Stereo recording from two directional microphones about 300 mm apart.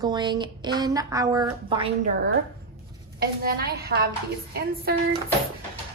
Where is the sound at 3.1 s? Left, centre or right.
Right.